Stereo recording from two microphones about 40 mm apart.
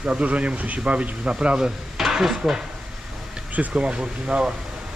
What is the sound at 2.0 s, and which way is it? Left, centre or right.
Speech, centre.